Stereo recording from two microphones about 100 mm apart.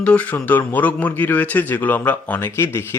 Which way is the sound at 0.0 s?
10° left (ahead or behind).